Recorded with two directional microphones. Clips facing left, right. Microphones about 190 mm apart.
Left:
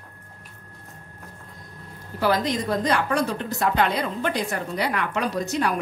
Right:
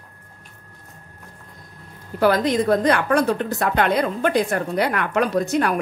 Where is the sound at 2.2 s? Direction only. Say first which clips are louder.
Right 5 dB; 55° right (ahead or behind).